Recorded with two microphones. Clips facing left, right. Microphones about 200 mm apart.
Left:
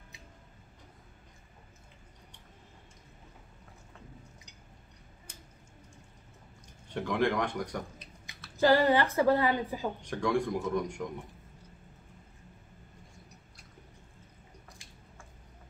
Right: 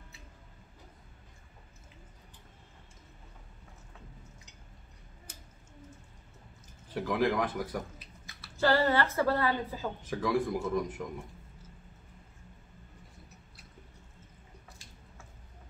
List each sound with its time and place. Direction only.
6.9 s a man's voice: 5° right (ahead or behind)
8.5 s a woman's voice: 15° left (ahead or behind)
10.0 s a man's voice: 5° right (ahead or behind)